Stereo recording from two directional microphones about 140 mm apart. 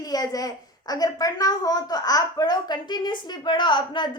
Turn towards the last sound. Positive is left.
turn(degrees=35)  # may be behind; listen again after turning